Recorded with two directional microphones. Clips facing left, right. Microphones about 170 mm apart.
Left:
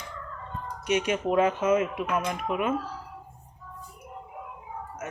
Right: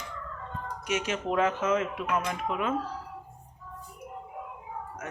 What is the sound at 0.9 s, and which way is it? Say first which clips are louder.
Speech: left 5 dB; 15° left (ahead or behind).